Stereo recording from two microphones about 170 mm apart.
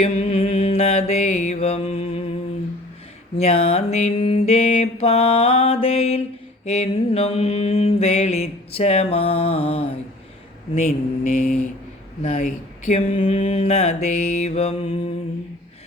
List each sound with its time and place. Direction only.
0.0 s music: 35° left (ahead or behind)
3.3 s mantra: 35° left (ahead or behind)
11.2 s mantra: 55° left (ahead or behind); by 15.1 s 35° left (ahead or behind)